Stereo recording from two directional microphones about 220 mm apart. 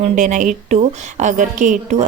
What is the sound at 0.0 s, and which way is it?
A woman's voice, 35° right (ahead or behind).